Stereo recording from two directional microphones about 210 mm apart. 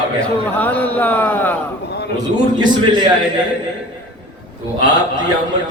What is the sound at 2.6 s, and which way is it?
Speech, 20° right (ahead or behind).